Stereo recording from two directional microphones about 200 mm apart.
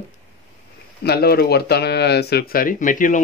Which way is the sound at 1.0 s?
50° left (ahead or behind).